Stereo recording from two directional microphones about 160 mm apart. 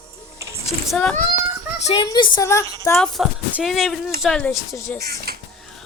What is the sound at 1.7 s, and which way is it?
Speech, 45° left (ahead or behind).